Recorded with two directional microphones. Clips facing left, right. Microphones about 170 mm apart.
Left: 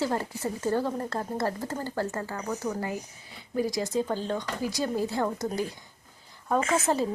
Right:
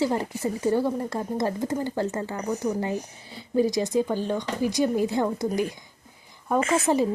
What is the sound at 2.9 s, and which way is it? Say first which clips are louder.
Speech: right 5 dB; 30° right (ahead or behind).